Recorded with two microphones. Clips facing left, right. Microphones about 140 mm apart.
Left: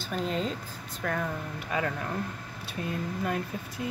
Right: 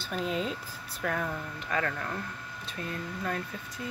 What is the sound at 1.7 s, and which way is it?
Speech, 15° left (ahead or behind).